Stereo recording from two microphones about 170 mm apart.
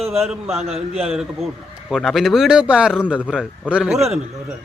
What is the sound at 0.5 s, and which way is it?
Speech, 40° right (ahead or behind).